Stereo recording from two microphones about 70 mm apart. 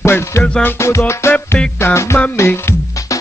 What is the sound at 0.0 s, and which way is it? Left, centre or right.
Music, left.